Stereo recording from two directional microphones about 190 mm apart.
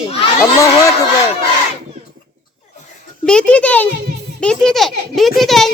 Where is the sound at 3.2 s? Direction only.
5° left (ahead or behind).